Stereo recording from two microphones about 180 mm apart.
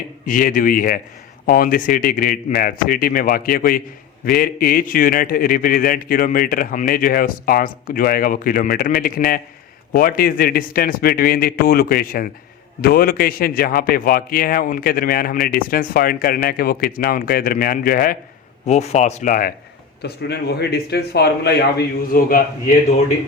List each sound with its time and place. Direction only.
0.3 s a man's voice: 50° left (ahead or behind)
18.6 s speech: 35° left (ahead or behind)
20.0 s a man's voice: 65° left (ahead or behind); by 23.0 s 45° left (ahead or behind)